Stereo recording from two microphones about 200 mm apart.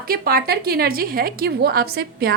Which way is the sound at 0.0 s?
50° right (ahead or behind).